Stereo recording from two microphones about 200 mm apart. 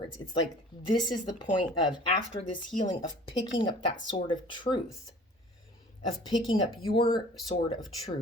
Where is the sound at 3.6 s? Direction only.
25° left (ahead or behind).